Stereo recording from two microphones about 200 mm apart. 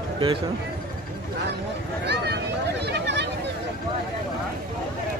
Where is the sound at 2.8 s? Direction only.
60° right (ahead or behind).